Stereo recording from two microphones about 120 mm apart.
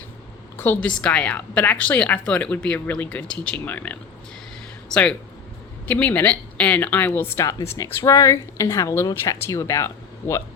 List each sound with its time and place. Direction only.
0.5 s a woman's voice: 20° left (ahead or behind)